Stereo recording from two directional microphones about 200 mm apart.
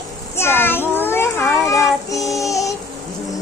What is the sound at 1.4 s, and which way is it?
Child singing, centre (ahead or behind).